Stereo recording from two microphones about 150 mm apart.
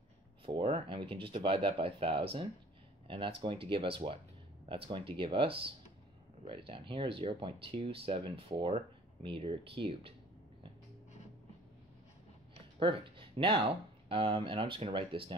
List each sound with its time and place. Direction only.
0.6 s speech: 35° right (ahead or behind)
12.7 s speech: 35° right (ahead or behind)